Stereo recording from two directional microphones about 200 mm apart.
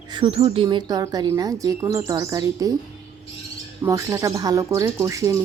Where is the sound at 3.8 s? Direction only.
15° right (ahead or behind).